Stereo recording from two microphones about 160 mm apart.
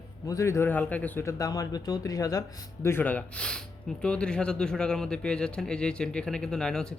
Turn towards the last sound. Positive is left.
turn(degrees=5)  # may be behind; listen again after turning